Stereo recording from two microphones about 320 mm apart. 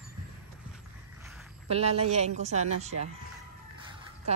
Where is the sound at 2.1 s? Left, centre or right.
Right.